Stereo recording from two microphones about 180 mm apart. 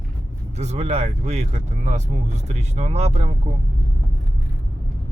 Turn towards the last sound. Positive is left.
turn(degrees=-40)  # may be behind; listen again after turning